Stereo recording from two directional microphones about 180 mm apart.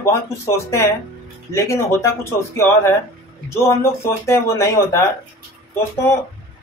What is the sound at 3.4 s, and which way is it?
Speech, 15° left (ahead or behind).